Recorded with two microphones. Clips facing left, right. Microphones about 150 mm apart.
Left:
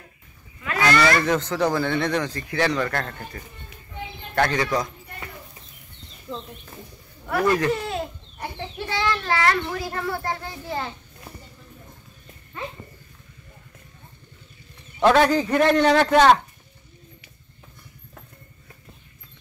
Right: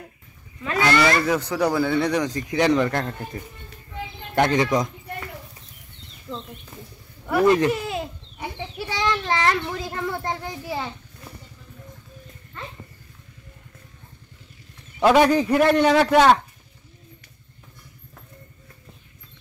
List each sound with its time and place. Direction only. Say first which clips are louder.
0.7 s speech: even; 20° right (ahead or behind)
1.2 s speech: even; 10° right (ahead or behind)
6.3 s speech: even; 10° left (ahead or behind)
7.4 s speech: right 4 dB; 20° right (ahead or behind)
7.7 s a sound: even; 10° right (ahead or behind)
8.9 s speech: even; 20° right (ahead or behind)
12.5 s speech: left 4 dB; 10° left (ahead or behind)
15.1 s speech: right 2 dB; 10° right (ahead or behind)